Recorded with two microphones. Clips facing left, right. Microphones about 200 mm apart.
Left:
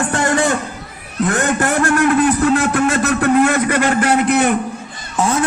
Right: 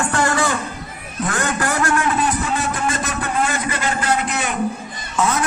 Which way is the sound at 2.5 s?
70° left (ahead or behind).